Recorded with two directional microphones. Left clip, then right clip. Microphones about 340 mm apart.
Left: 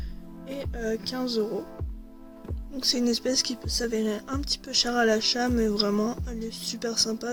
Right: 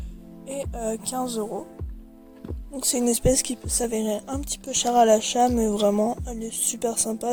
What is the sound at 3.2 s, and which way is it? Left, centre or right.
Speech, centre.